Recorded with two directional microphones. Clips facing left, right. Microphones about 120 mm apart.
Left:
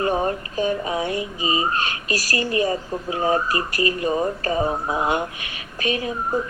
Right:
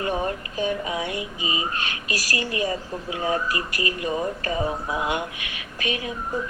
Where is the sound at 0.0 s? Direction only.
35° left (ahead or behind).